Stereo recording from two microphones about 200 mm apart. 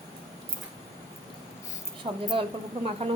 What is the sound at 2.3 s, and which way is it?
Speech, 30° right (ahead or behind).